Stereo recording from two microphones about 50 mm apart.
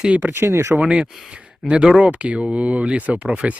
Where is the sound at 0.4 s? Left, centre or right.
Right.